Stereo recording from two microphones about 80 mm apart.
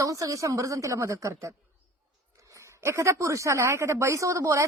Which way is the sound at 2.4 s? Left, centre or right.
Right.